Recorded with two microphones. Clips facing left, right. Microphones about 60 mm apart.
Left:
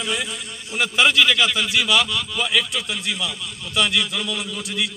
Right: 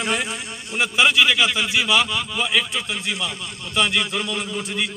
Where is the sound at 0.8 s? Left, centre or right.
Centre.